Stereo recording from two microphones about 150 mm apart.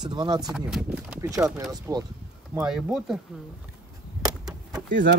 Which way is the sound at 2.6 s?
5° right (ahead or behind).